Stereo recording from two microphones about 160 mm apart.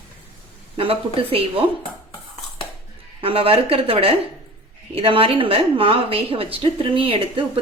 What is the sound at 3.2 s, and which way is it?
A woman's voice, 35° right (ahead or behind).